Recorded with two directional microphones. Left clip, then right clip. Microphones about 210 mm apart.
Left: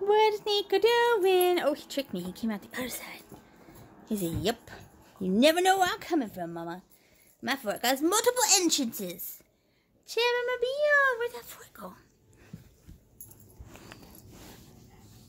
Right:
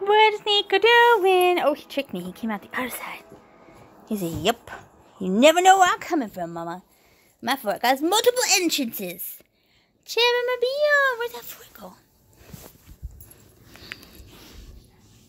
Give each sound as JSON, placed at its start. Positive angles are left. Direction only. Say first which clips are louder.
{"t": 0.0, "sound": "a woman's voice", "louder": "right 6 dB", "side_deg": 0}
{"t": 10.0, "sound": "speech", "louder": "right 7 dB", "side_deg": -30}
{"t": 11.5, "sound": "speech", "louder": "right 2 dB", "side_deg": -5}